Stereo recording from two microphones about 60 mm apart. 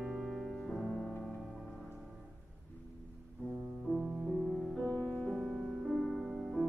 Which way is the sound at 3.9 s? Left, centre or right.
Centre.